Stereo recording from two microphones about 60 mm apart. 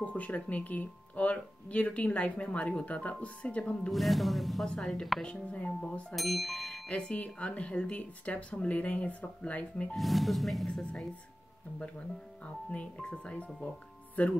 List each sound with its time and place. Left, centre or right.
0.0 s speech: left
3.9 s speech: centre
4.6 s a woman's voice: centre
5.2 s a woman's voice: centre
6.1 s speech: centre
6.9 s speech: centre
9.9 s speech: centre
10.7 s a woman's voice: centre
12.4 s speech: left